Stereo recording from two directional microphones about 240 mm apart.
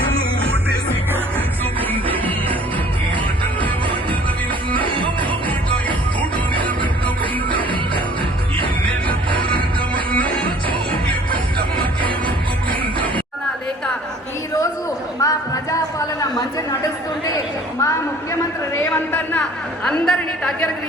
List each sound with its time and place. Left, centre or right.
1.9 s music: centre
4.9 s music: centre
9.0 s music: centre
15.2 s a sound: centre